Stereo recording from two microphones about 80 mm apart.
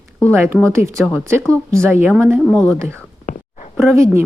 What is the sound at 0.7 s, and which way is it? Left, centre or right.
Speech, right.